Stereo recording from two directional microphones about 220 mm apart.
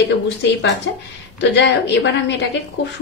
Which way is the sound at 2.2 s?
55° left (ahead or behind).